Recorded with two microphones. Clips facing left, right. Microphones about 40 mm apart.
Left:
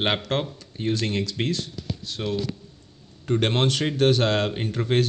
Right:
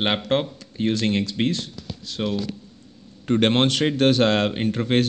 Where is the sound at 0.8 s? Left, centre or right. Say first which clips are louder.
Right 3 dB; right.